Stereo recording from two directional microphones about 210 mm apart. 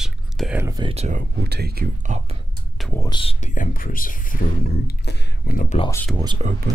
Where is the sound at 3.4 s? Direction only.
40° left (ahead or behind).